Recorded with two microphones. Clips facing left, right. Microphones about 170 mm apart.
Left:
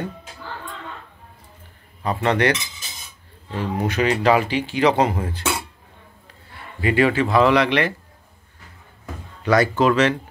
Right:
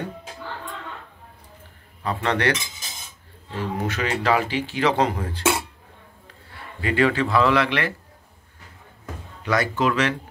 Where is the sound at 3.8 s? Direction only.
15° left (ahead or behind).